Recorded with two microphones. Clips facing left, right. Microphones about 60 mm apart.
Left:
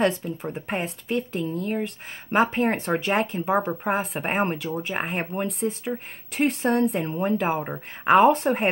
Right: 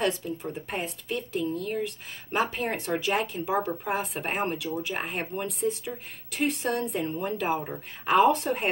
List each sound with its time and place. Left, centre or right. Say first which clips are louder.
0.0 s speech: left 4 dB; left
2.7 s speech: left 4 dB; left
5.9 s speech: left 6 dB; left